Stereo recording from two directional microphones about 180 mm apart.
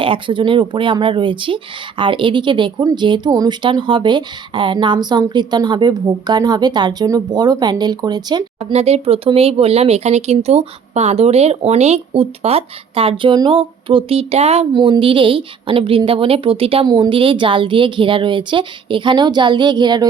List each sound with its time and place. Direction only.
0.0 s speech: 30° right (ahead or behind)
8.7 s speech: 35° right (ahead or behind)